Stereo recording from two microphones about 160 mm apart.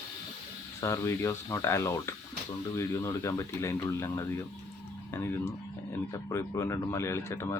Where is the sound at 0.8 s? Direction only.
20° left (ahead or behind).